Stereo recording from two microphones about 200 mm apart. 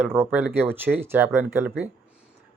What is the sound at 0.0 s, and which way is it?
Speech, 10° right (ahead or behind).